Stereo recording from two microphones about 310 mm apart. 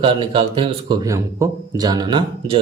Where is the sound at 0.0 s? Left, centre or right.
Centre.